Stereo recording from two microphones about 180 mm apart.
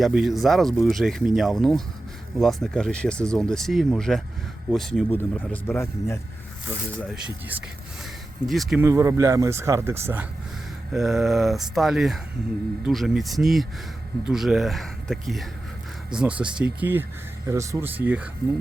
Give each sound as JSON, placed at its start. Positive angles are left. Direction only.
{"t": 0.0, "sound": "speech", "side_deg": 0}
{"t": 7.1, "sound": "speech", "side_deg": -10}
{"t": 8.8, "sound": "speech", "side_deg": -15}
{"t": 10.9, "sound": "speech", "side_deg": 0}